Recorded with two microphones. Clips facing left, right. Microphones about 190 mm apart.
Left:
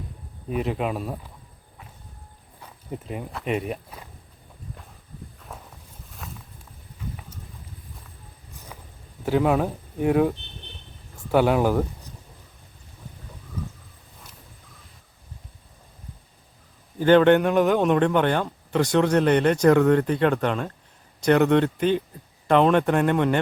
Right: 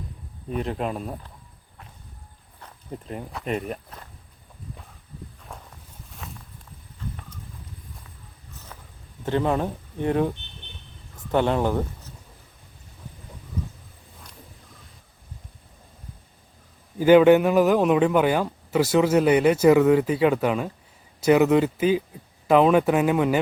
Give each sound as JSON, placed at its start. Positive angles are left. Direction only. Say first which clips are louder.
{"t": 0.5, "sound": "speech", "louder": "left 2 dB", "side_deg": 5}
{"t": 2.6, "sound": "speech", "louder": "left 2 dB", "side_deg": 10}
{"t": 5.5, "sound": "walk", "louder": "left 1 dB", "side_deg": 5}
{"t": 8.7, "sound": "a sound", "louder": "left 2 dB", "side_deg": 10}
{"t": 9.2, "sound": "speech", "louder": "left 2 dB", "side_deg": 5}
{"t": 17.0, "sound": "speech", "louder": "right 2 dB", "side_deg": -10}